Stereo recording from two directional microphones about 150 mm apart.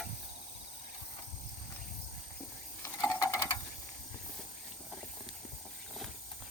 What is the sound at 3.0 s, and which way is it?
Ratchet, 25° left (ahead or behind).